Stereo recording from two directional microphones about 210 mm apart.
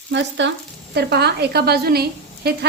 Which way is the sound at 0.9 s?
50° right (ahead or behind).